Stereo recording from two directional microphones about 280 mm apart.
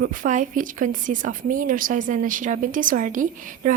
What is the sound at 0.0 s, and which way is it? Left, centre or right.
Speech, right.